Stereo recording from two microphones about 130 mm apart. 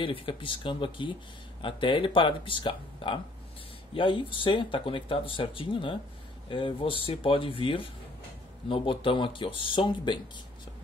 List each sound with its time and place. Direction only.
0.0 s speech: 40° left (ahead or behind)